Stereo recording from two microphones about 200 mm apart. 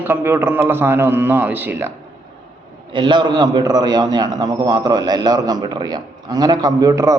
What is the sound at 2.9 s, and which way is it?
A man's voice, 25° right (ahead or behind).